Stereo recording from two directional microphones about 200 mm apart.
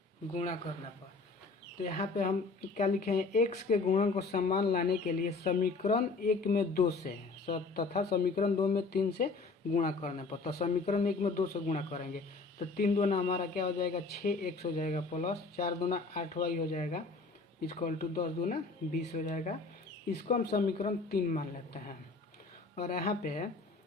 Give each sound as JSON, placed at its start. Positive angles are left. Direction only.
{"t": 1.8, "sound": "speech", "side_deg": 35}
{"t": 9.7, "sound": "speech", "side_deg": 40}